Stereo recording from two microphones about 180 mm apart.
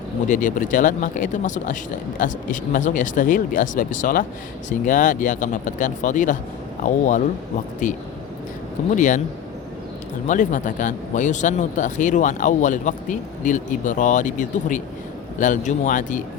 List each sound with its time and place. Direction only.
0.3 s speech: 45° left (ahead or behind)
9.0 s speech: 45° left (ahead or behind)
10.2 s speech: 45° left (ahead or behind)